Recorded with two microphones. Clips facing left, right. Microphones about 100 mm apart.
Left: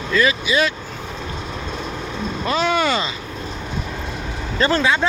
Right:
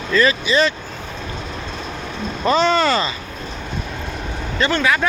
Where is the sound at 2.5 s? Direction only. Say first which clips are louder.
Right 4 dB; 10° left (ahead or behind).